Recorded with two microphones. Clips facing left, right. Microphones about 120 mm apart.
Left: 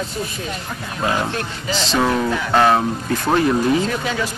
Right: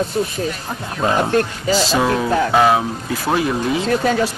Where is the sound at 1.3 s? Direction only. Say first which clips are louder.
Right 8 dB; 40° right (ahead or behind).